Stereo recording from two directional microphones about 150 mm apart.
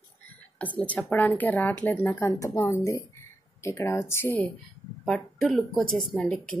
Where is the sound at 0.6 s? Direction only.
10° left (ahead or behind).